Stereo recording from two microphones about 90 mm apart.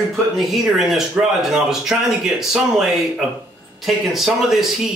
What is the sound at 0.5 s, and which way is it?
A man's voice, centre (ahead or behind).